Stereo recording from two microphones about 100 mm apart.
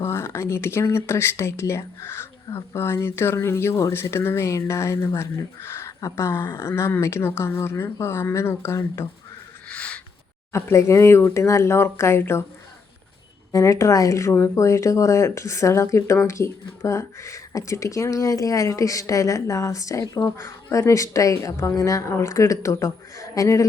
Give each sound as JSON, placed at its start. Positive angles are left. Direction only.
{"t": 0.0, "sound": "speech", "side_deg": 25}
{"t": 9.6, "sound": "a sound", "side_deg": 10}
{"t": 10.5, "sound": "speech", "side_deg": 30}
{"t": 13.5, "sound": "speech", "side_deg": 30}